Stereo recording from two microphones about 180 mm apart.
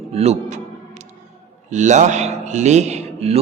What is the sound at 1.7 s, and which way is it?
A man's voice, 40° right (ahead or behind).